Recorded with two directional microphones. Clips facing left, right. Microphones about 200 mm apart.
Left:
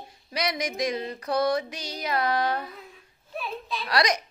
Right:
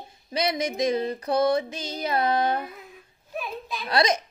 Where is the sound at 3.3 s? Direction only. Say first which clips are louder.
Even; 15° right (ahead or behind).